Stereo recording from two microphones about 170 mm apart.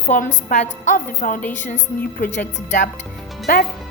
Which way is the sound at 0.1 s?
50° left (ahead or behind).